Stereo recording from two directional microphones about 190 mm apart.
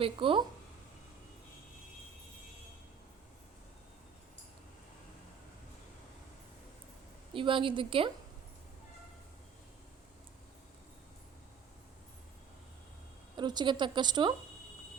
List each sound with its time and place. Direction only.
0.0 s a woman's voice: 25° right (ahead or behind)
7.3 s a woman's voice: 25° right (ahead or behind)
13.3 s a woman's voice: 20° right (ahead or behind)